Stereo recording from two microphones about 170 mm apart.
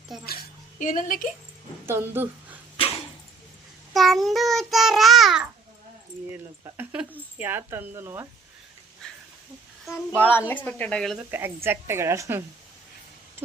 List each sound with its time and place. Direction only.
0.8 s a woman's voice: 50° left (ahead or behind)
1.9 s speech: 15° right (ahead or behind)
2.7 s dog: 35° left (ahead or behind)
3.9 s child singing: centre (ahead or behind)
6.3 s a woman's voice: 10° right (ahead or behind)
9.0 s a sound: 5° left (ahead or behind)
10.2 s a woman's voice: 10° left (ahead or behind)
11.3 s a woman's voice: 10° right (ahead or behind)